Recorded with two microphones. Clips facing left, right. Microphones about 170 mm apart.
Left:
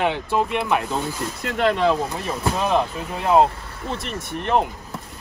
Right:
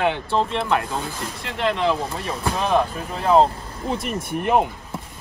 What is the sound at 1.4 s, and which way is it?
Speech, 45° left (ahead or behind).